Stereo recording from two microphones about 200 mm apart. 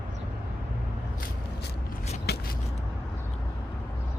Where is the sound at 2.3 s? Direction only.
55° left (ahead or behind).